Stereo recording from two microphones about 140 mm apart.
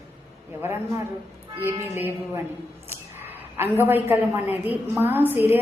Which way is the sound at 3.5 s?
15° right (ahead or behind).